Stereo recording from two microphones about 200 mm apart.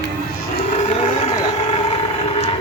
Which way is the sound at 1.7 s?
30° left (ahead or behind).